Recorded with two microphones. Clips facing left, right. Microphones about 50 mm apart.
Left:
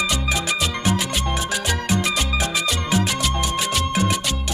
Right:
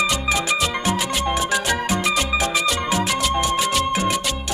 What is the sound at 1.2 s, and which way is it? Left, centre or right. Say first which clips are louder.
Music: right 3 dB; centre.